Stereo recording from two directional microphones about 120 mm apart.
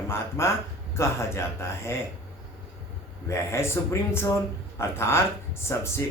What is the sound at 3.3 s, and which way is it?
Speech, 25° left (ahead or behind).